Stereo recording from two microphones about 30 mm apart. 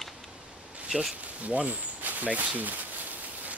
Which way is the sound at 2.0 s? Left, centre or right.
Right.